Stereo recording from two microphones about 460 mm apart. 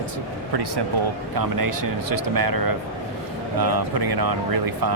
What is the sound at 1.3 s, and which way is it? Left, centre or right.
Speech, right.